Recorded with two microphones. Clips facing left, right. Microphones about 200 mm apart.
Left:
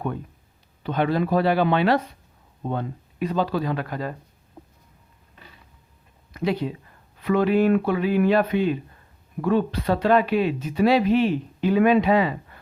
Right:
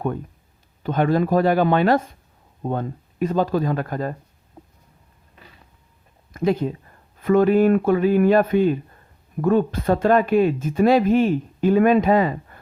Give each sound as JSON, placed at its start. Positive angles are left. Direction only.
{"t": 0.8, "sound": "speech", "side_deg": -45}
{"t": 6.3, "sound": "speech", "side_deg": -45}